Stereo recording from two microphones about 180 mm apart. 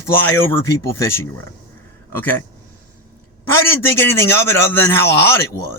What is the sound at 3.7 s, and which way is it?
Speech, 15° left (ahead or behind).